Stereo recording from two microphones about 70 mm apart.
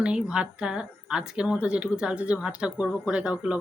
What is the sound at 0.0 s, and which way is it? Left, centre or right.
A woman's voice, centre.